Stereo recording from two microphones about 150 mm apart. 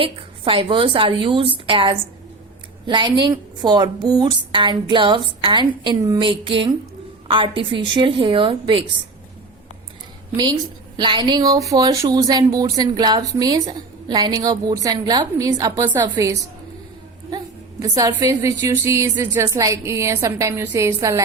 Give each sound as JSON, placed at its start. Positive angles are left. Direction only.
{"t": 0.0, "sound": "a woman's voice", "side_deg": -35}
{"t": 10.9, "sound": "a woman's voice", "side_deg": -30}